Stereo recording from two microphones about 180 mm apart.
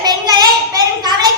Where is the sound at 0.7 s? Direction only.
25° right (ahead or behind).